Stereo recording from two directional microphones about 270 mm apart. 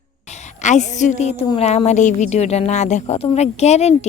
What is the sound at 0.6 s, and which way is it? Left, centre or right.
A woman's voice, left.